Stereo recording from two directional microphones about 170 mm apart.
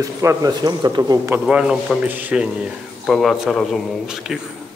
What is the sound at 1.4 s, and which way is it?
A man's voice, 5° right (ahead or behind).